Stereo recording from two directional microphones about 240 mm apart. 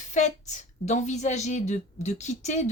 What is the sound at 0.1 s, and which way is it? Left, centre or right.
A woman's voice, left.